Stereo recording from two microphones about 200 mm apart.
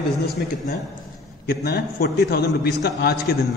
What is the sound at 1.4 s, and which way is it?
A man's voice, 50° left (ahead or behind).